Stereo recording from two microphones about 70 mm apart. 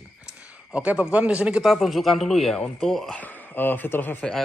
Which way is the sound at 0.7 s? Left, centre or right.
Centre.